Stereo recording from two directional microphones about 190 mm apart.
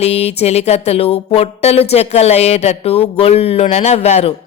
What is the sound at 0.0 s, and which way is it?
Speech, 35° left (ahead or behind).